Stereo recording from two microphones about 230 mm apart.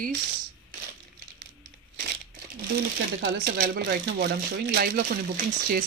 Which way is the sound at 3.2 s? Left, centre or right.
Right.